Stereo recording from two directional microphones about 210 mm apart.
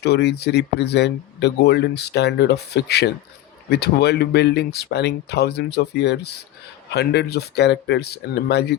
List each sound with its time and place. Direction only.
0.0 s speech: 50° left (ahead or behind)